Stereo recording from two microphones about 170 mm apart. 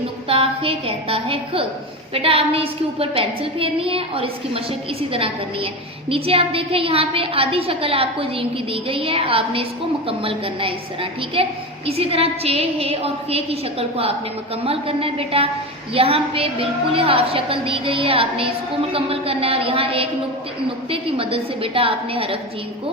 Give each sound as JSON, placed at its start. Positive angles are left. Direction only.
{"t": 0.3, "sound": "a woman's voice", "side_deg": -35}